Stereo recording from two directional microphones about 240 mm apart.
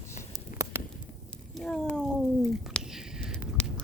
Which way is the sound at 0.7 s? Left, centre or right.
Centre.